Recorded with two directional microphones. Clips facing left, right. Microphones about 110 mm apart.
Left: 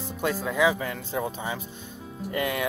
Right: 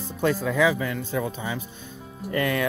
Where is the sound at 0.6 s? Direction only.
30° left (ahead or behind).